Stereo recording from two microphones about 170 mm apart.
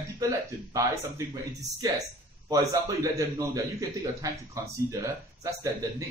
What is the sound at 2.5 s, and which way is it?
A man's voice, 20° right (ahead or behind).